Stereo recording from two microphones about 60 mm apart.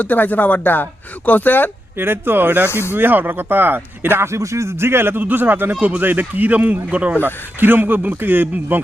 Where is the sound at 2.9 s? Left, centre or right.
Right.